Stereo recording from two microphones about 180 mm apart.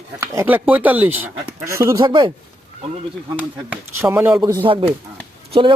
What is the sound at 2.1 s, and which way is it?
Speech, 25° right (ahead or behind).